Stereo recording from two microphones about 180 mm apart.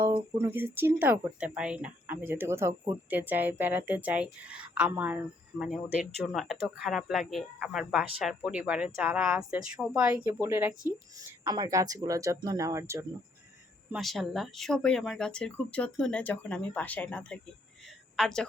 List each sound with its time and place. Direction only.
0.0 s speech: 15° right (ahead or behind)
11.4 s speech: 20° right (ahead or behind)
13.9 s speech: centre (ahead or behind)